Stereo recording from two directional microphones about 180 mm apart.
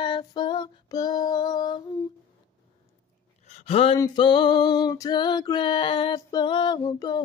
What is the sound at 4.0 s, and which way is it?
Female singing, 25° left (ahead or behind).